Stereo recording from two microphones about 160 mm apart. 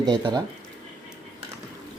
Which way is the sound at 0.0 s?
25° right (ahead or behind).